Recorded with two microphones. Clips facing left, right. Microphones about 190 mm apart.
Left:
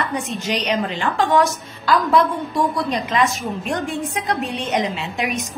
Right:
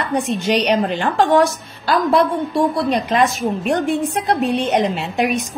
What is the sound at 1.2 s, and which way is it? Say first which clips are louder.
Speech: right 3 dB; 30° right (ahead or behind).